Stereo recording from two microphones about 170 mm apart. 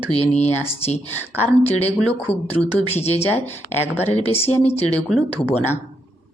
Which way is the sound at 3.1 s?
10° left (ahead or behind).